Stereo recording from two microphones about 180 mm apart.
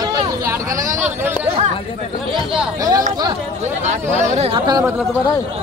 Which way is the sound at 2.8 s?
20° right (ahead or behind).